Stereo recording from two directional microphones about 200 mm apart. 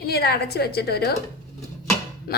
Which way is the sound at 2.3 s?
50° left (ahead or behind).